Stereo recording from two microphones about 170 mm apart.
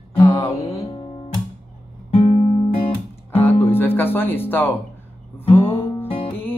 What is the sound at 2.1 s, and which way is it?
Music, 35° left (ahead or behind).